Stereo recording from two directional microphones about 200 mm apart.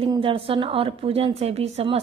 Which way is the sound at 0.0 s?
25° right (ahead or behind).